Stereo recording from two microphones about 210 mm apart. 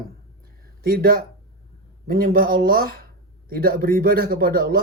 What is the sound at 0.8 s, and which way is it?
Speech, 45° right (ahead or behind).